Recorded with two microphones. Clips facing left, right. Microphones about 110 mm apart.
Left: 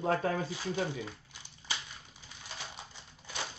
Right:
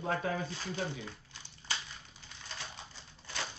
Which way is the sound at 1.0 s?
15° left (ahead or behind).